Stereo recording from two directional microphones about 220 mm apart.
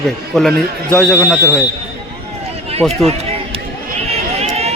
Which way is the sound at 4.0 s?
30° right (ahead or behind).